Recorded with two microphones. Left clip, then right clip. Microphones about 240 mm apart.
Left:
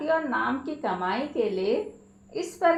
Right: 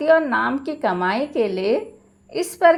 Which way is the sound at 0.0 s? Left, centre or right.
Right.